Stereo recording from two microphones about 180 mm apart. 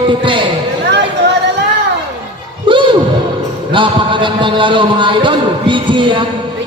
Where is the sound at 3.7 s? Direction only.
25° right (ahead or behind).